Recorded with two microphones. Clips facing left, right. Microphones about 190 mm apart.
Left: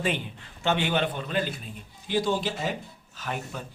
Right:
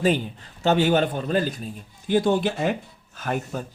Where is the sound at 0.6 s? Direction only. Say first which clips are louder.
Right 6 dB; 40° right (ahead or behind).